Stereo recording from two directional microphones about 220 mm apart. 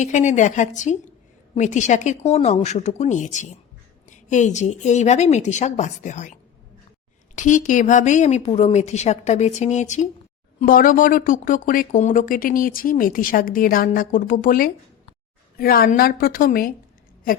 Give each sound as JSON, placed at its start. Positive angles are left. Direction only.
{"t": 0.0, "sound": "a woman's voice", "side_deg": 35}